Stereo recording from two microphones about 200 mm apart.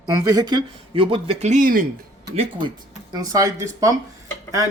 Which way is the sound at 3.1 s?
20° right (ahead or behind).